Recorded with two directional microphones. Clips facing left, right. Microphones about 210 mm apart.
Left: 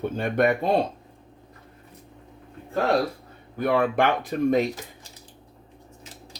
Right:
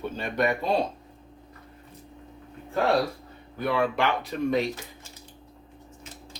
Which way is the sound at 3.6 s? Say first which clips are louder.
Left 3 dB; 50° left (ahead or behind).